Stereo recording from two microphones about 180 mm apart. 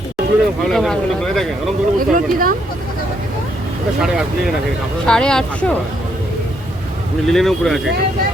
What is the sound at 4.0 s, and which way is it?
Speech, centre (ahead or behind).